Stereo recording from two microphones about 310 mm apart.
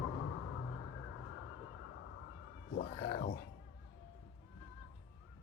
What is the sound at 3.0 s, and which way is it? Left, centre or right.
Music, left.